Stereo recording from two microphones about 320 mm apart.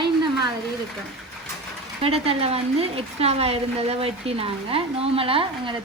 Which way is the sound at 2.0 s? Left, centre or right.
Centre.